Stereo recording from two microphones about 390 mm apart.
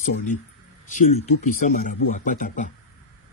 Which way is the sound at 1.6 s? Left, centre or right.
Centre.